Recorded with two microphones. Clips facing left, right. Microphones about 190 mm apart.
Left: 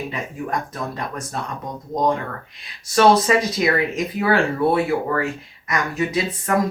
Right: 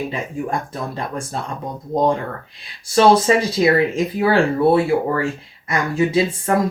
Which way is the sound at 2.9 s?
30° right (ahead or behind).